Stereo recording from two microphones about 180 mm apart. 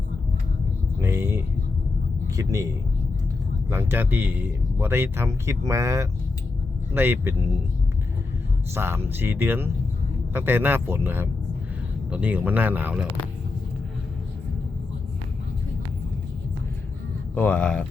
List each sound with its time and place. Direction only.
1.0 s a sound: 15° right (ahead or behind)
2.3 s speech: 20° right (ahead or behind)
8.7 s speech: 15° right (ahead or behind)
17.3 s speech: 10° left (ahead or behind)